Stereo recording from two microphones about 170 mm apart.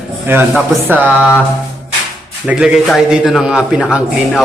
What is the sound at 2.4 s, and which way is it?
A man's voice, 5° right (ahead or behind).